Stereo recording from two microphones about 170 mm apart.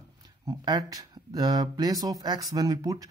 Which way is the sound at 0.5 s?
20° right (ahead or behind).